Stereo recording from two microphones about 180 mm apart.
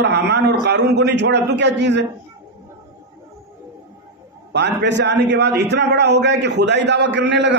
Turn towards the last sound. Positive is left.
turn(degrees=-75)  # may be behind; listen again after turning